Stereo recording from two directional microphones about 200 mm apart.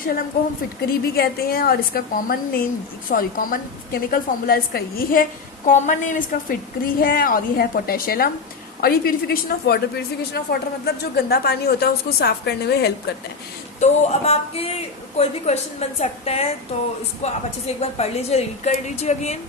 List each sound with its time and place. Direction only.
0.0 s a woman's voice: 45° left (ahead or behind)
5.6 s a woman's voice: 40° left (ahead or behind); by 12.9 s 55° left (ahead or behind)
13.7 s a woman's voice: 35° left (ahead or behind)